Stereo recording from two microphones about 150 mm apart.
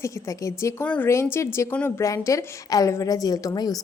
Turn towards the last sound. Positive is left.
turn(degrees=25)  # may be behind; listen again after turning